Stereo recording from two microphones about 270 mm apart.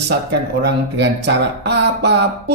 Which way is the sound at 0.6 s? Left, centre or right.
Right.